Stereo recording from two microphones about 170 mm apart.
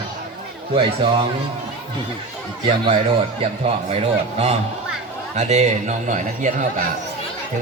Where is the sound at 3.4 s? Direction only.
35° right (ahead or behind).